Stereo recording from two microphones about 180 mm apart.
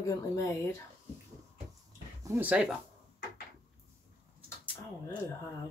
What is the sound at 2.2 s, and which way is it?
Speech, 15° right (ahead or behind).